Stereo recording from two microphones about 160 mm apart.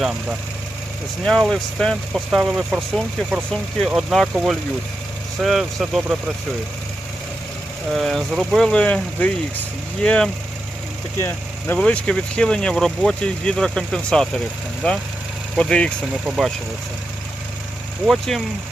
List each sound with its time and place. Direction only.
0.0 s speech: 5° right (ahead or behind)
7.9 s speech: centre (ahead or behind)
11.2 s speech: 15° left (ahead or behind)
16.2 s speech: 5° right (ahead or behind)
18.0 s speech: centre (ahead or behind)